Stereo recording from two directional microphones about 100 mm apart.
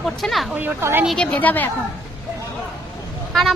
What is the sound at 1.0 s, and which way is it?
Speech, 5° left (ahead or behind).